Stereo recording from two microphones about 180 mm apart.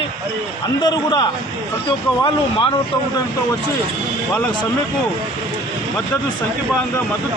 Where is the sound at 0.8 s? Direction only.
25° left (ahead or behind).